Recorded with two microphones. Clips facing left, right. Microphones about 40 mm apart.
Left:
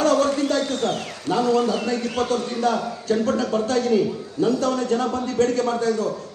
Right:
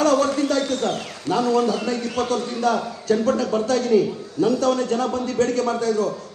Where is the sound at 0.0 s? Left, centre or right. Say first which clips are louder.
Right 1 dB; left.